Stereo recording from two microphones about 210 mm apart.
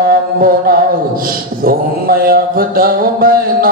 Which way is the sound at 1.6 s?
45° right (ahead or behind).